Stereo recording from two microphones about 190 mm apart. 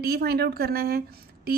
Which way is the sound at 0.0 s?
55° right (ahead or behind).